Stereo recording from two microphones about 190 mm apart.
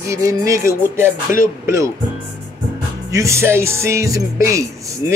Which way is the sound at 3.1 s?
15° right (ahead or behind).